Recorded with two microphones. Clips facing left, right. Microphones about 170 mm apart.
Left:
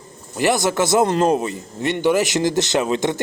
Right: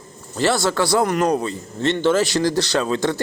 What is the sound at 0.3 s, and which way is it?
Speech, 15° left (ahead or behind).